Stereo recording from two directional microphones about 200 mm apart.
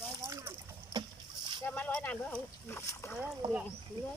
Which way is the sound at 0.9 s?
20° right (ahead or behind).